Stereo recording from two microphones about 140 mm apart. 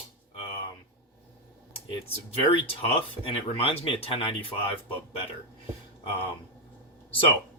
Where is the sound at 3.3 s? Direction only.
45° left (ahead or behind).